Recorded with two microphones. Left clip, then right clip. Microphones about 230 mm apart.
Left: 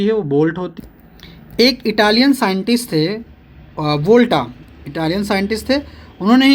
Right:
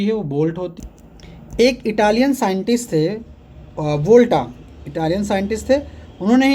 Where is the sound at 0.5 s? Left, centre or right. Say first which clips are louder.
Left 1 dB; left.